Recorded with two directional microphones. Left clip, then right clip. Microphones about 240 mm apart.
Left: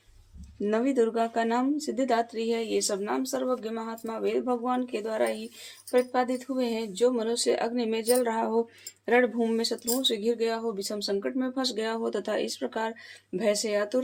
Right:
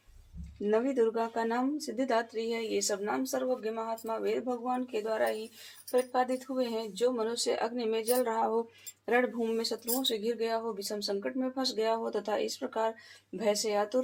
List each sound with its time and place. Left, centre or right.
0.6 s speech: left